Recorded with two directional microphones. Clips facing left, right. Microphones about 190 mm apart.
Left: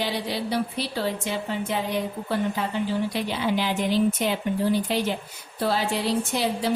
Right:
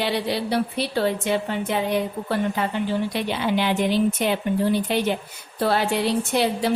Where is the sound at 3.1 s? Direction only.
60° right (ahead or behind).